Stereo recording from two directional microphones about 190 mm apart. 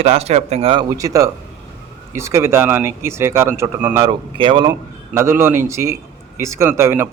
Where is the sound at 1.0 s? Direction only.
15° right (ahead or behind).